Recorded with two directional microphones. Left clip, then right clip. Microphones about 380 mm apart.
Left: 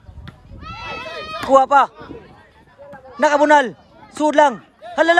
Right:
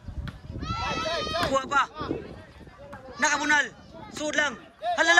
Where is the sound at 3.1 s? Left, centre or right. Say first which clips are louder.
Left 10 dB; centre.